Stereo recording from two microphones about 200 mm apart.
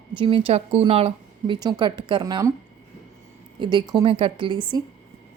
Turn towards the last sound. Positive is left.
turn(degrees=-25)  # may be behind; listen again after turning